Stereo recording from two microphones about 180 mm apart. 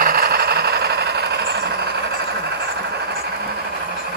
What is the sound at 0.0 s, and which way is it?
Vehicle, 55° right (ahead or behind).